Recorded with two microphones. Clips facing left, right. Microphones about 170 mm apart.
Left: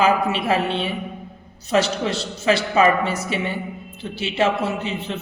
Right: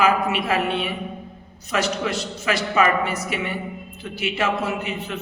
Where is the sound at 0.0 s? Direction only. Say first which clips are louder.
Left 1 dB; 30° left (ahead or behind).